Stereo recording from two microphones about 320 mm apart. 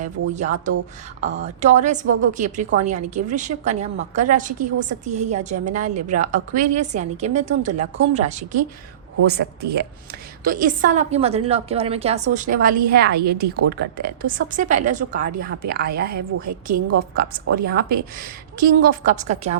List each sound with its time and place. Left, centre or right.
0.0 s a woman's voice: right